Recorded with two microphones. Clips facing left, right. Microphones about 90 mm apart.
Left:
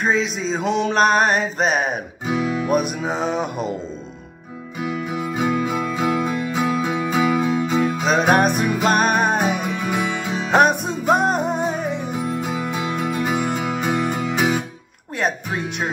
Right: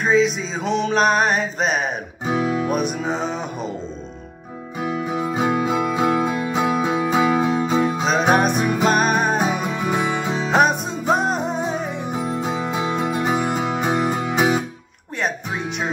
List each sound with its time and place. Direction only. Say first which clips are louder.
0.0 s music: right 3 dB; centre (ahead or behind)
2.2 s music: right 1 dB; 30° right (ahead or behind)
2.6 s music: left 1 dB; centre (ahead or behind)
4.9 s music: right 3 dB; 25° right (ahead or behind)
8.0 s music: left 3 dB; centre (ahead or behind)
9.7 s music: right 1 dB; 25° right (ahead or behind)
10.5 s music: left 2 dB; centre (ahead or behind)
12.3 s music: right 2 dB; 25° right (ahead or behind)